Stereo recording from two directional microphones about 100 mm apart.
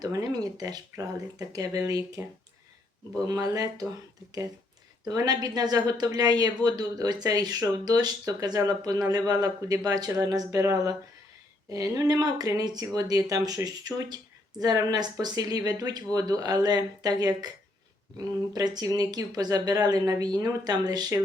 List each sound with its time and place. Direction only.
0.0 s speech: 35° right (ahead or behind)
2.2 s speech: 25° right (ahead or behind)
3.2 s speech: 40° right (ahead or behind)
5.0 s speech: 40° right (ahead or behind)